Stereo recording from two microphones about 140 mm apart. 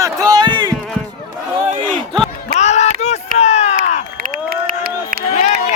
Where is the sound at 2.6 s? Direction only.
55° left (ahead or behind).